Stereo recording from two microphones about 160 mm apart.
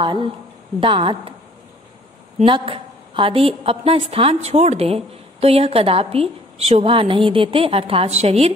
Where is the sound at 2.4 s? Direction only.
35° right (ahead or behind).